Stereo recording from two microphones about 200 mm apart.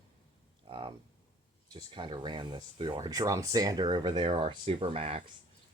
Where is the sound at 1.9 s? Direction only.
25° right (ahead or behind).